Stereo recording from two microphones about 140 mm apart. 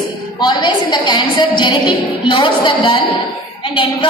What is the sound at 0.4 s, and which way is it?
A woman's voice, 30° left (ahead or behind).